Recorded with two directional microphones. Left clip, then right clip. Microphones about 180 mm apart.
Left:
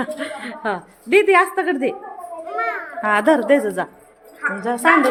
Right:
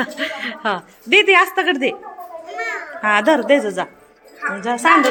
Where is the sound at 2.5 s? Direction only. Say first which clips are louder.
Left 2 dB; 55° left (ahead or behind).